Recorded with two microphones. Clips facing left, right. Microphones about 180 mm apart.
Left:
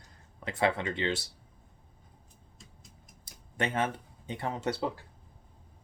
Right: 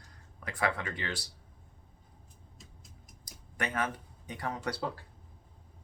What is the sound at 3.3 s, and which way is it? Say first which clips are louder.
Speech: left 4 dB; 25° left (ahead or behind).